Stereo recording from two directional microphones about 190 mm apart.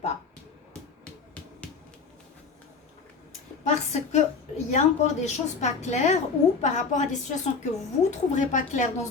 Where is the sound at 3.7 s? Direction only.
35° left (ahead or behind).